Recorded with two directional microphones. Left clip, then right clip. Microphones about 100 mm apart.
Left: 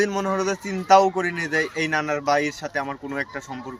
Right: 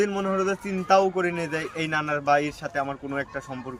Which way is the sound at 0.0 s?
25° right (ahead or behind).